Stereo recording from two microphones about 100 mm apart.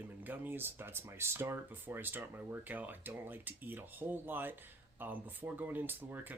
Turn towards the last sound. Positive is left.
turn(degrees=-20)  # may be behind; listen again after turning